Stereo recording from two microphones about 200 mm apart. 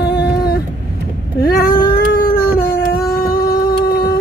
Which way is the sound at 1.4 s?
50° left (ahead or behind).